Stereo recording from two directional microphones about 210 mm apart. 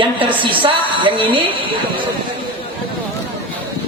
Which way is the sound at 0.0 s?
25° right (ahead or behind).